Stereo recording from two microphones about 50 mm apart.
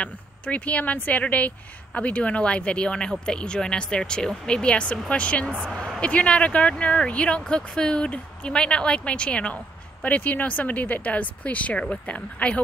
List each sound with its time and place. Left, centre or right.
0.0 s speech: left